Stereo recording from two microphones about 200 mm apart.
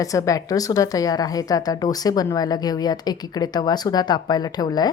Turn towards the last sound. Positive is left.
turn(degrees=20)  # may be behind; listen again after turning